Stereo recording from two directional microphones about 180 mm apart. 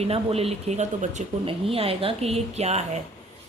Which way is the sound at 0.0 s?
35° right (ahead or behind).